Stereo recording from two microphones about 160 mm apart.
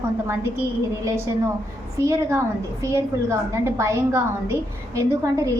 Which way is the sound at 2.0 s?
20° right (ahead or behind).